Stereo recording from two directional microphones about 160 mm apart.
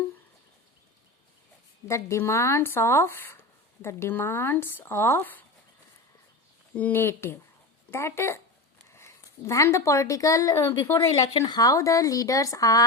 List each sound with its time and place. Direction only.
1.9 s speech: 15° left (ahead or behind)
6.7 s a woman's voice: 10° left (ahead or behind)
11.1 s a woman's voice: 30° left (ahead or behind)